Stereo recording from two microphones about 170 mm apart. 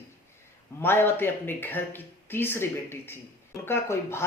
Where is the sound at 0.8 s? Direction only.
10° left (ahead or behind).